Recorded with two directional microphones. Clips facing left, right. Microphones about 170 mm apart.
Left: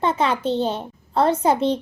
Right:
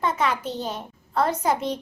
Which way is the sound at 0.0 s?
30° left (ahead or behind).